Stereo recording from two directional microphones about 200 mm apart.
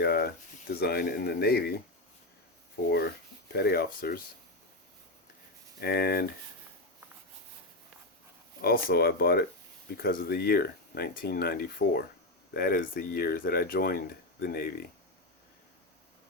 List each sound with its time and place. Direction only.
0.0 s speech: 50° left (ahead or behind)
3.5 s speech: 50° left (ahead or behind)
5.8 s speech: 50° left (ahead or behind)
8.6 s speech: 50° left (ahead or behind)